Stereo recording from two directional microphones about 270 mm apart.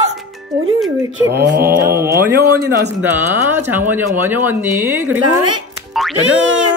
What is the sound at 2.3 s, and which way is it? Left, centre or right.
Speech, right.